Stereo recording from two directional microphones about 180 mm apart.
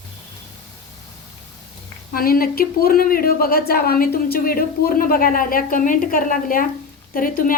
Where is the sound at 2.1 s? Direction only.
55° left (ahead or behind).